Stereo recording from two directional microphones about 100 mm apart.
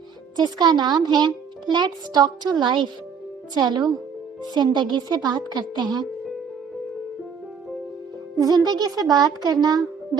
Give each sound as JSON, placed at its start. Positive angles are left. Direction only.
{"t": 0.3, "sound": "a child's voice", "side_deg": -45}
{"t": 8.4, "sound": "a child's voice", "side_deg": -40}